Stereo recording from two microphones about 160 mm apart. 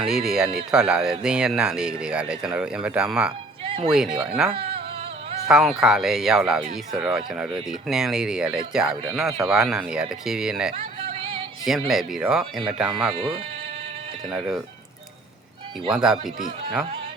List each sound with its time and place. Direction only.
0.0 s speech: 5° right (ahead or behind)
3.6 s music: 35° right (ahead or behind)
3.9 s speech: 5° right (ahead or behind)
4.5 s a sound: 35° right (ahead or behind)
5.5 s speech: 5° right (ahead or behind)
11.0 s music: 35° right (ahead or behind)
11.6 s speech: centre (ahead or behind)
13.1 s speech: 35° right (ahead or behind)
14.3 s speech: centre (ahead or behind)
15.9 s speech: 5° right (ahead or behind)